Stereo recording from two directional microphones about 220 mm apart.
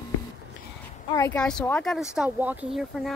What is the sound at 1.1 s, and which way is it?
Speech, 10° left (ahead or behind).